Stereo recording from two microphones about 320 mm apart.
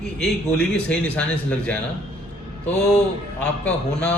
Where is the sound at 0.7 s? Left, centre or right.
Centre.